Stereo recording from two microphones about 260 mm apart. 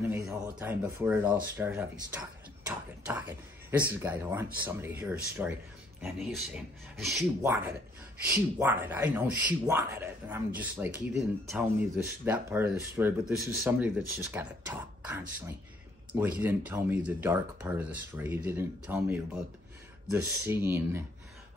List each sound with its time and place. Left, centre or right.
0.0 s speech: centre
2.6 s a sound: centre
4.0 s speech: centre